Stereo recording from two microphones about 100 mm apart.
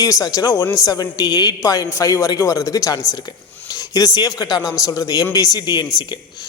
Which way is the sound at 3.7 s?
35° left (ahead or behind).